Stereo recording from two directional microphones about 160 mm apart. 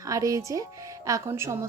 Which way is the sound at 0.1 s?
20° right (ahead or behind).